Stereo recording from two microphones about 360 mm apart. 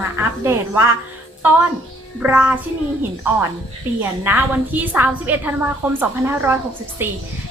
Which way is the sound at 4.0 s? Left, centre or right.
Centre.